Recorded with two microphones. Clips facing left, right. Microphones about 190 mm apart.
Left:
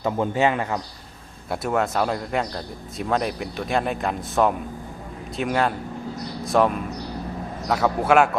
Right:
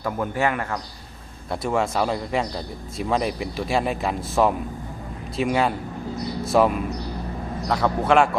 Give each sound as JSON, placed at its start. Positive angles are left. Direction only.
{"t": 0.0, "sound": "a man's voice", "side_deg": 20}
{"t": 1.5, "sound": "a man's voice", "side_deg": 0}